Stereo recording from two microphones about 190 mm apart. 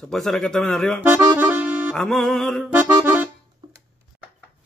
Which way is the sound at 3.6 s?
25° right (ahead or behind).